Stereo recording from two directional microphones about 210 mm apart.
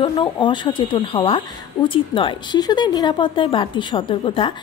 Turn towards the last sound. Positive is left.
turn(degrees=25)  # may be behind; listen again after turning